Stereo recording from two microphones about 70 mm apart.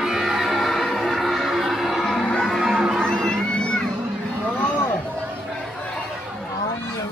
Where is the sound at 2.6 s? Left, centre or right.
Centre.